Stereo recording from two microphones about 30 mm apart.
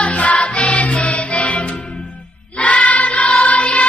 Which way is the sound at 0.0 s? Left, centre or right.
Left.